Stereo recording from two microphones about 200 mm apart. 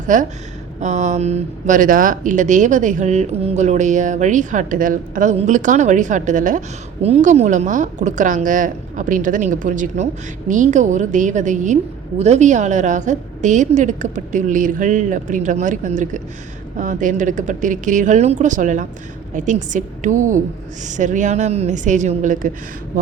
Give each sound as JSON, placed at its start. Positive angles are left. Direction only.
{"t": 0.1, "sound": "speech", "side_deg": -40}